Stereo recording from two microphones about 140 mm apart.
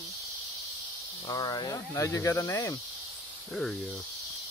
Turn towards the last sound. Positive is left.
turn(degrees=5)  # may be behind; listen again after turning